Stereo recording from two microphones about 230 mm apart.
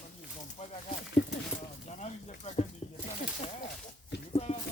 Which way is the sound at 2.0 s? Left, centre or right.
Left.